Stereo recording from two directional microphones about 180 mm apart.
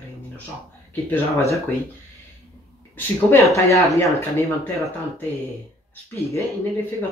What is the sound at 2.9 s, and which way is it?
Speech, 15° left (ahead or behind).